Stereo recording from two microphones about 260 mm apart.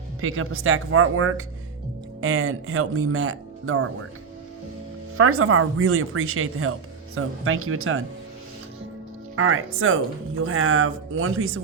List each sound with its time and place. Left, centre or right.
0.2 s speech: right
5.1 s speech: right
9.3 s speech: right